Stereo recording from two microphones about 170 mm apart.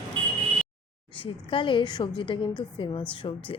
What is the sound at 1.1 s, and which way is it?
A woman's voice, 30° left (ahead or behind).